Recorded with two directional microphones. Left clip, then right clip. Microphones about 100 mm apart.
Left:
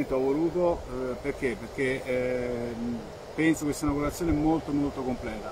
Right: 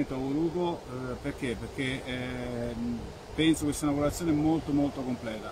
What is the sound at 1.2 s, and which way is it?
Speech, 40° right (ahead or behind).